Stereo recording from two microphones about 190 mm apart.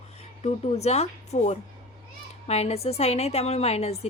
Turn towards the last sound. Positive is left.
turn(degrees=35)  # may be behind; listen again after turning